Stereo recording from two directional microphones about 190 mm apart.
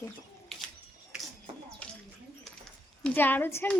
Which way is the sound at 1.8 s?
5° left (ahead or behind).